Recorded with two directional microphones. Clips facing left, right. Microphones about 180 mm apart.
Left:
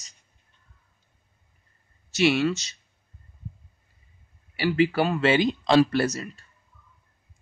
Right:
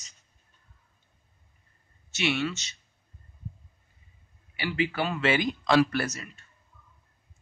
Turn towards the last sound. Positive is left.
turn(degrees=35)  # may be behind; listen again after turning